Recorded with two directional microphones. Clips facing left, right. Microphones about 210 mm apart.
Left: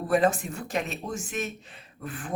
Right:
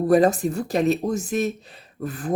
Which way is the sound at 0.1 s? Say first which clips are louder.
Right 5 dB; 35° right (ahead or behind).